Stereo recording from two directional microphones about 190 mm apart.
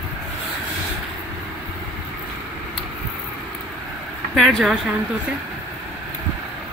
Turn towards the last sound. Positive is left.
turn(degrees=0)  # may be behind; listen again after turning